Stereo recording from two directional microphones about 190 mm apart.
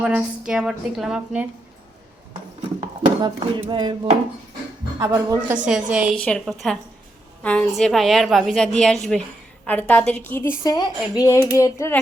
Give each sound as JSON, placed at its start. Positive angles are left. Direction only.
{"t": 0.0, "sound": "a woman's voice", "side_deg": -5}
{"t": 3.2, "sound": "a sound", "side_deg": -25}
{"t": 4.9, "sound": "speech", "side_deg": -15}
{"t": 5.6, "sound": "a woman's voice", "side_deg": -5}